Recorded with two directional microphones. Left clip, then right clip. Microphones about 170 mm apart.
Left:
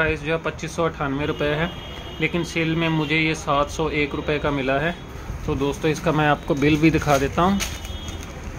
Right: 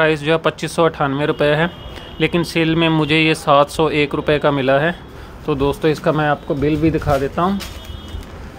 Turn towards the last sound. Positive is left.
turn(degrees=-10)  # may be behind; listen again after turning